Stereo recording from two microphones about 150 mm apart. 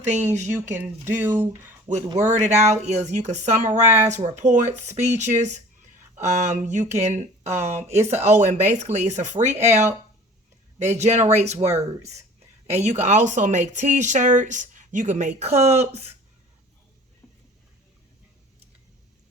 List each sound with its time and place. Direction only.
0.0 s speech: 50° right (ahead or behind)
1.0 s speech: 15° right (ahead or behind)
2.4 s speech: 50° right (ahead or behind)
7.4 s speech: 15° right (ahead or behind)
8.1 s speech: 50° right (ahead or behind)
10.9 s speech: 50° right (ahead or behind)